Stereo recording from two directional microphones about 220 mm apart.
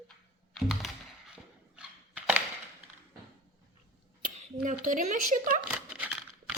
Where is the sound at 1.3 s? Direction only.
5° right (ahead or behind).